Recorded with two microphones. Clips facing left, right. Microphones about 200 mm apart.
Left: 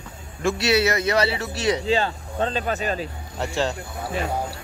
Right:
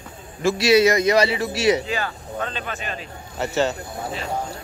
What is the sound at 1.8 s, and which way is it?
Speech, 25° left (ahead or behind).